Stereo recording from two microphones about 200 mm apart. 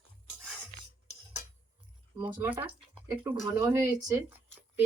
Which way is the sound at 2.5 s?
10° right (ahead or behind).